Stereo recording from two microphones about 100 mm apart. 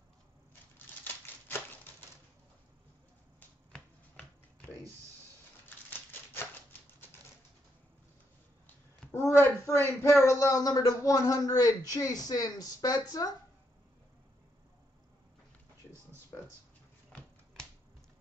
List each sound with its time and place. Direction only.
1.0 s typewriter: 20° left (ahead or behind)
3.7 s finger snapping: 10° left (ahead or behind)
5.9 s a sound: 20° left (ahead or behind)
9.1 s a child's voice: 30° left (ahead or behind)